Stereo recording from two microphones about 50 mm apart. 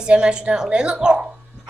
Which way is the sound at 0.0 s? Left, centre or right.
Centre.